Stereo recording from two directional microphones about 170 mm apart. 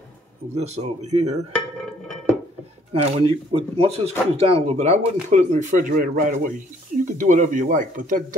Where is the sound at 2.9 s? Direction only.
35° right (ahead or behind).